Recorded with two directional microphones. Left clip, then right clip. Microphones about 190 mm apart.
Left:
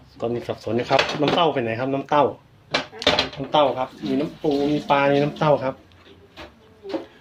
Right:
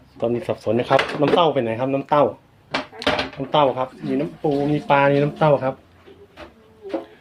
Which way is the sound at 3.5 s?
25° right (ahead or behind).